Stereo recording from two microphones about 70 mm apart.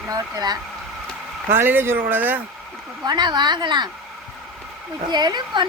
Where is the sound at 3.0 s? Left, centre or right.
Right.